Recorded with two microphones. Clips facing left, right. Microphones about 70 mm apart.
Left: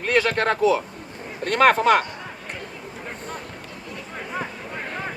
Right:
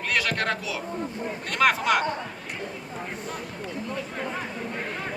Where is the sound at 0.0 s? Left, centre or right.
Left.